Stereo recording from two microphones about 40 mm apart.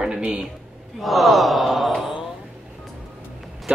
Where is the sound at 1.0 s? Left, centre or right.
Centre.